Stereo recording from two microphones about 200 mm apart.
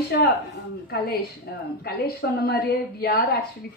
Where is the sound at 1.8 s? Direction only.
50° left (ahead or behind).